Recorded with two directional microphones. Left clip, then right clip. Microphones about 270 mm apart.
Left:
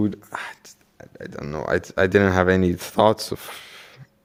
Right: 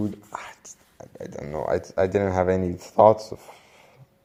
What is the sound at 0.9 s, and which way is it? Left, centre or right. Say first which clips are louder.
Speech: left 1 dB; centre.